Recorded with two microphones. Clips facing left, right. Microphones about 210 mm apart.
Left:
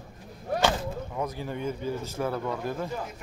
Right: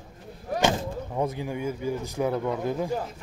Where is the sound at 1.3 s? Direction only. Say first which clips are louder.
Right 2 dB; 10° right (ahead or behind).